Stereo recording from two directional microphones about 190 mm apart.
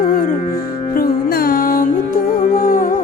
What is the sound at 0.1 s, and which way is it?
Music, 45° left (ahead or behind).